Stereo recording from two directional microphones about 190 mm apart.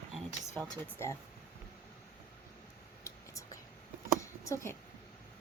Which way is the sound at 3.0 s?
15° left (ahead or behind).